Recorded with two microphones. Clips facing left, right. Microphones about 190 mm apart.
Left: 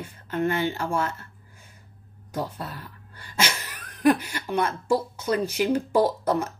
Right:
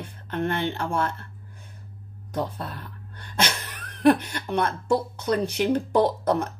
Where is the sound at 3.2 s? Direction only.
5° left (ahead or behind).